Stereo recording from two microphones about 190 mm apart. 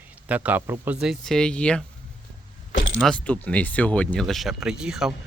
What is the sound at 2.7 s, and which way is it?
Keys jangling, 85° left.